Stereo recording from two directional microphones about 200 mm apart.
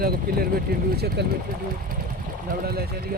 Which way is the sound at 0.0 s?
50° right (ahead or behind).